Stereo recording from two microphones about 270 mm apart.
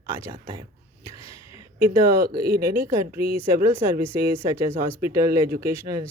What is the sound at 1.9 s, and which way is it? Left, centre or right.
Speech, centre.